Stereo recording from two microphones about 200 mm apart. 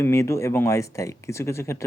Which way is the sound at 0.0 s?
15° left (ahead or behind).